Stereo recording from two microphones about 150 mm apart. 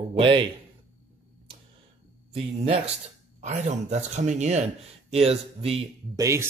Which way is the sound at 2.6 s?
45° right (ahead or behind).